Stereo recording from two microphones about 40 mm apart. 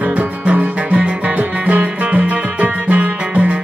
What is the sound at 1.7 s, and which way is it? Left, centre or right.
Music, right.